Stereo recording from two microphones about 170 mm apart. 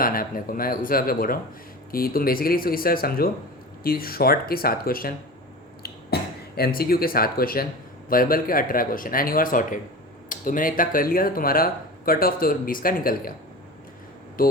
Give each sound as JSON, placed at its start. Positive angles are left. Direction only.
{"t": 0.0, "sound": "speech", "side_deg": 55}
{"t": 6.1, "sound": "a sound", "side_deg": 70}
{"t": 6.6, "sound": "speech", "side_deg": 60}
{"t": 14.4, "sound": "speech", "side_deg": 55}